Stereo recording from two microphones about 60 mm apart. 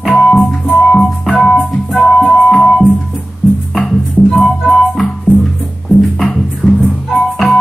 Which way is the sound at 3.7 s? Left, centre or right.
Centre.